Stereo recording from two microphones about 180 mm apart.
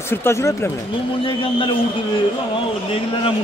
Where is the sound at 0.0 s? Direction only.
15° left (ahead or behind).